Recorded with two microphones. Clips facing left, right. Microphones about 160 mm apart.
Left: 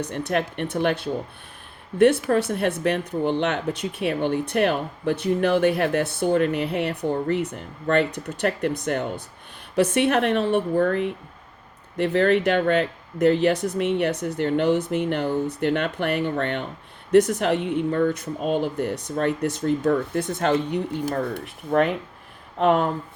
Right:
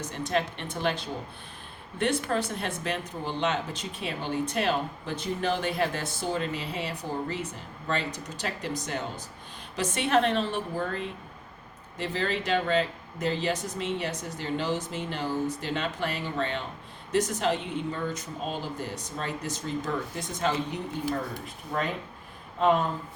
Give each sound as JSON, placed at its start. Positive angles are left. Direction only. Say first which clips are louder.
{"t": 0.0, "sound": "speech", "louder": "left 4 dB", "side_deg": 60}
{"t": 21.0, "sound": "speech", "louder": "left 5 dB", "side_deg": 45}
{"t": 21.3, "sound": "speech", "louder": "left 11 dB", "side_deg": 65}